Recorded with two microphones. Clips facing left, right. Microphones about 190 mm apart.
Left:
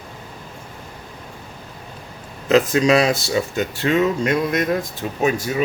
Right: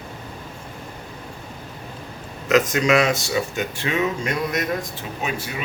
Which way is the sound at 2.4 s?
30° left (ahead or behind).